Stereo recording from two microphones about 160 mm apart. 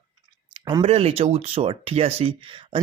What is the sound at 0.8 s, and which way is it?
Speech, 40° right (ahead or behind).